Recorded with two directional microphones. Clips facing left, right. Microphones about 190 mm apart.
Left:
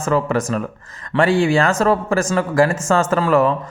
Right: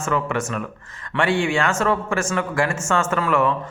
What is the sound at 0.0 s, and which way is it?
Speech, 35° left (ahead or behind).